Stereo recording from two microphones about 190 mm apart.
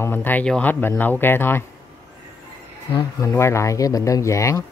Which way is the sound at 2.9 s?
15° left (ahead or behind).